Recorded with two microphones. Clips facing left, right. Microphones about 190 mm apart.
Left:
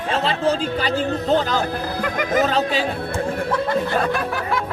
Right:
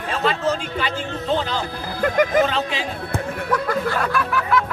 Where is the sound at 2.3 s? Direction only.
40° left (ahead or behind).